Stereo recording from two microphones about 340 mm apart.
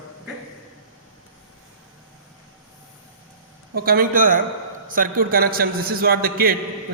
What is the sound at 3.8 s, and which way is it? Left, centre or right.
A man's voice, right.